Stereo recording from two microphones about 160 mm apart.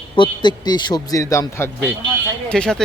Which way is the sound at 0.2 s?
25° left (ahead or behind).